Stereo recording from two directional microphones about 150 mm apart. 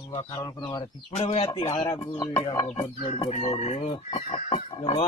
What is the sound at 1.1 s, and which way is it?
Fowl, 45° left (ahead or behind).